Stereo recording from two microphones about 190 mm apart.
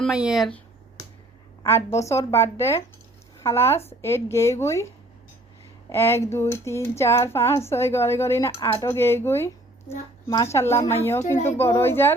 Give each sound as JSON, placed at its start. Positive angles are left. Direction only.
{"t": 0.0, "sound": "speech", "side_deg": -5}
{"t": 1.6, "sound": "speech", "side_deg": 15}
{"t": 5.9, "sound": "speech", "side_deg": 10}